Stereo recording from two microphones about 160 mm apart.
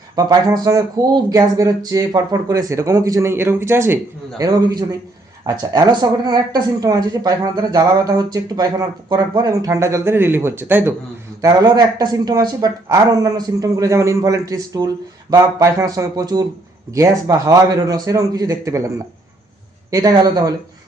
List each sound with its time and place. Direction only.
0.2 s speech: 25° right (ahead or behind)
19.9 s speech: 20° right (ahead or behind)